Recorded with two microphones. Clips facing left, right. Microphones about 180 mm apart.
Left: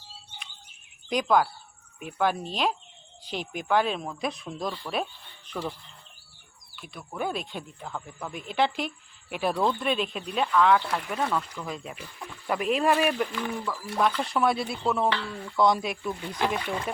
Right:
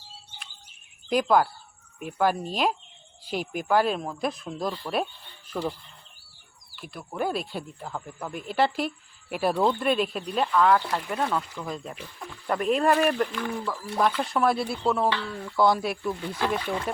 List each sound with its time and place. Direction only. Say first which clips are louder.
1.1 s speech: right 2 dB; 5° right (ahead or behind)
6.7 s speech: right 3 dB; 5° right (ahead or behind)